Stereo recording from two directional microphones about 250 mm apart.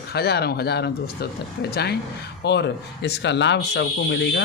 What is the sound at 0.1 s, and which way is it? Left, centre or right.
Speech, left.